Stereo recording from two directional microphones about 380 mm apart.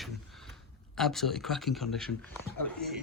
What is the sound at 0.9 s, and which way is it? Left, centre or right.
Speech, centre.